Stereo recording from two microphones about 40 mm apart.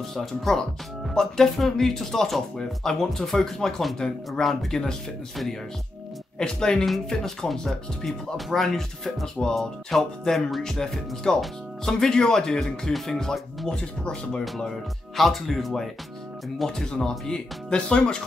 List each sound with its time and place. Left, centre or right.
0.1 s speech: centre
4.5 s speech: centre
6.3 s speech: centre
15.1 s speech: centre; by 18.2 s left